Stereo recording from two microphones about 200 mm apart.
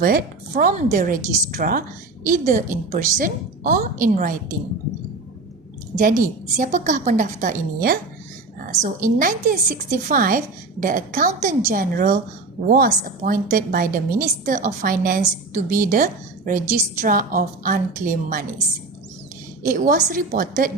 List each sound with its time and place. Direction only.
0.0 s a woman's voice: 45° right (ahead or behind)
6.0 s a woman's voice: 40° right (ahead or behind)
19.6 s a woman's voice: 40° right (ahead or behind)